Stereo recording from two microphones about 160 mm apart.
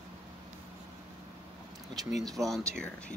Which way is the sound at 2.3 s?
Centre (ahead or behind).